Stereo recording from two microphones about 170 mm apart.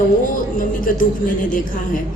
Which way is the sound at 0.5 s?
55° left (ahead or behind).